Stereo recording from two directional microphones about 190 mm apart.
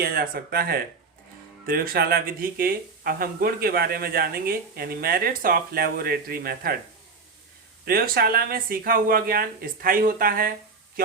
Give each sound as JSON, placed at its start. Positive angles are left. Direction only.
{"t": 0.0, "sound": "speech", "side_deg": -50}
{"t": 7.9, "sound": "speech", "side_deg": -50}